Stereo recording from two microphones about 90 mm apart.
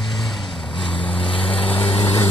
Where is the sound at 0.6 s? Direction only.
70° left (ahead or behind).